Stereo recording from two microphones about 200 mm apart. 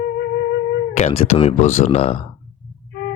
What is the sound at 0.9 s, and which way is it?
Speech, 30° left (ahead or behind).